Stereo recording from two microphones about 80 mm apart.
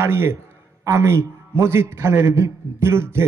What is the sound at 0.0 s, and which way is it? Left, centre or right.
A man's voice, right.